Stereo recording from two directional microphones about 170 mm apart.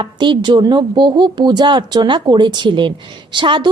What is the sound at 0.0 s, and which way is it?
A woman's voice, 25° right (ahead or behind).